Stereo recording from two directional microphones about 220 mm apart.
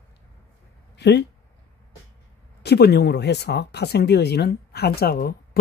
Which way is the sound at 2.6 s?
50° left (ahead or behind).